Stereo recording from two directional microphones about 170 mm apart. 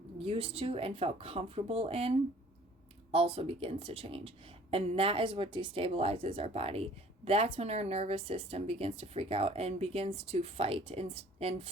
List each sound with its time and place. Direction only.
0.2 s a woman's voice: 35° right (ahead or behind)